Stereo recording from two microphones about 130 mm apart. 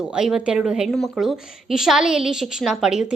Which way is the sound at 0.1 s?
5° right (ahead or behind).